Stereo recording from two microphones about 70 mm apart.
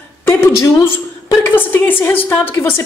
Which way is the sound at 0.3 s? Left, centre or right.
Left.